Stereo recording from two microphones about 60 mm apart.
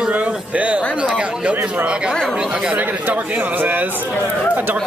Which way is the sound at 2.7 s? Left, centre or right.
Right.